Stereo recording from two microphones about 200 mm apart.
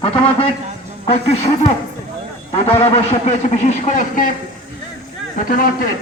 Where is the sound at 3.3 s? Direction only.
35° left (ahead or behind).